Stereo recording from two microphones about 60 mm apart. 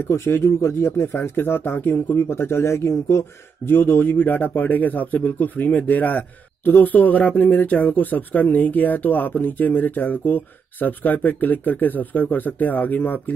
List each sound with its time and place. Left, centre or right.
0.1 s speech: left
3.6 s a man's voice: left